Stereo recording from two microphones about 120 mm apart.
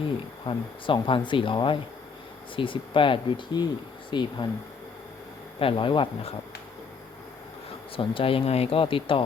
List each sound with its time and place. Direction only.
0.0 s speech: 45° left (ahead or behind)
5.5 s speech: 45° left (ahead or behind)
7.9 s speech: 50° left (ahead or behind)